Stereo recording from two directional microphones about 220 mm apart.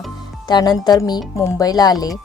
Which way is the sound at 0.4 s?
20° left (ahead or behind).